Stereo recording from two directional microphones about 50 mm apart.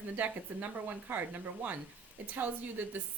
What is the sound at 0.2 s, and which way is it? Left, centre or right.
A woman's voice, right.